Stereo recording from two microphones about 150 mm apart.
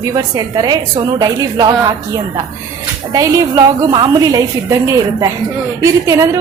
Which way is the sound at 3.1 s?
25° right (ahead or behind).